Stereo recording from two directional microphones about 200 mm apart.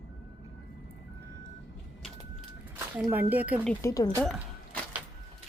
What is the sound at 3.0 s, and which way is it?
Speech, 10° right (ahead or behind).